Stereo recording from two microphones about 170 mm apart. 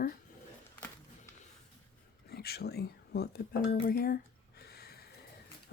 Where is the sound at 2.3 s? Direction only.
65° left (ahead or behind).